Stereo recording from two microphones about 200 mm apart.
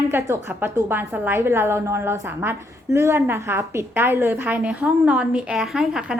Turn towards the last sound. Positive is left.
turn(degrees=-5)  # may be behind; listen again after turning